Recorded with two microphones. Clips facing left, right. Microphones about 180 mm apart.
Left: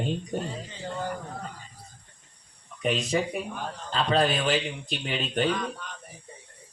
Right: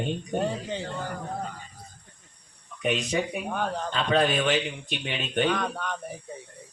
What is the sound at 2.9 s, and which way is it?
Speech, 30° left (ahead or behind).